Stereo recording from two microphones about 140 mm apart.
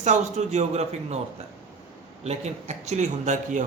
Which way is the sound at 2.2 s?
50° right (ahead or behind).